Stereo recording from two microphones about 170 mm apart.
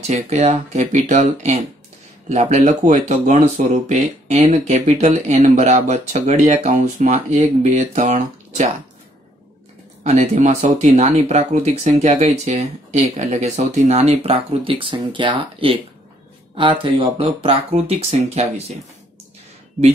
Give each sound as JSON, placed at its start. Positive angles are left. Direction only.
{"t": 0.0, "sound": "speech", "side_deg": -40}
{"t": 10.0, "sound": "speech", "side_deg": -45}